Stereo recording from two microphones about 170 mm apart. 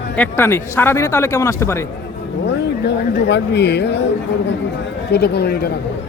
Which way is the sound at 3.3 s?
90° left.